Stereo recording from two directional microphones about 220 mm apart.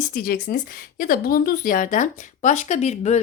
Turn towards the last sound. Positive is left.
turn(degrees=30)  # may be behind; listen again after turning